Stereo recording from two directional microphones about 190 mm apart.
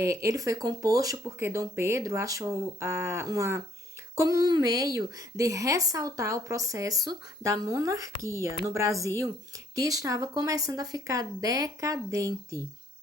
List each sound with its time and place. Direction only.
0.0 s speech: 15° right (ahead or behind)